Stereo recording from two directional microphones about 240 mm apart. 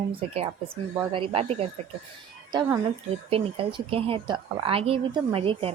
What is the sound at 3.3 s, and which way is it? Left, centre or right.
A woman's voice, right.